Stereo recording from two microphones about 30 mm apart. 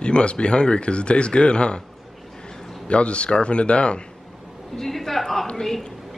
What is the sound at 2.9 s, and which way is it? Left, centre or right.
Speech, left.